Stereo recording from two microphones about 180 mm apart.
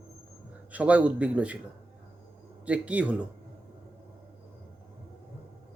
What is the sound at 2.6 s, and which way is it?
Speech, 10° right (ahead or behind).